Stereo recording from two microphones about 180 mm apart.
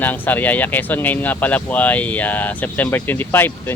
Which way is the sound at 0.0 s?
10° left (ahead or behind).